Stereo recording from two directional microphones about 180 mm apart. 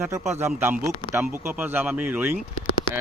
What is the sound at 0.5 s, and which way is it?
A man's voice, 10° right (ahead or behind).